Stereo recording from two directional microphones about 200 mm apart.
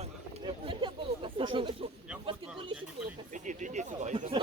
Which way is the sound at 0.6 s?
25° right (ahead or behind).